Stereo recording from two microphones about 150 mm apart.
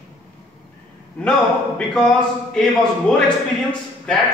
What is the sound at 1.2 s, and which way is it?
A man's voice, 5° left (ahead or behind).